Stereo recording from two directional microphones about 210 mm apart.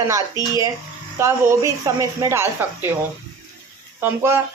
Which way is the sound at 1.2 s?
15° right (ahead or behind).